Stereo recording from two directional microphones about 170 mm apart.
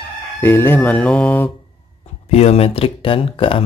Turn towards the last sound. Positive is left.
turn(degrees=30)  # may be behind; listen again after turning